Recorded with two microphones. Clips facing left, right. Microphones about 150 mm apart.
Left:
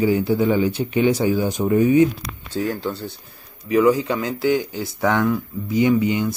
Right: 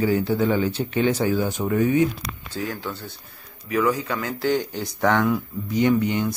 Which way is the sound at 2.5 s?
30° left (ahead or behind).